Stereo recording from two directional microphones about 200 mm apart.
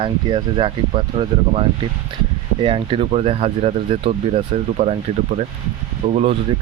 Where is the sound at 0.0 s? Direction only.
25° right (ahead or behind).